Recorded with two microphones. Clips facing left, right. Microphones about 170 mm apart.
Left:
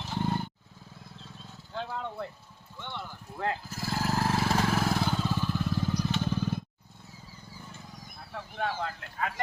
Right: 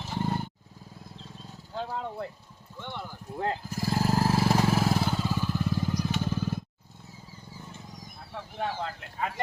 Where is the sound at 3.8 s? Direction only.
15° right (ahead or behind).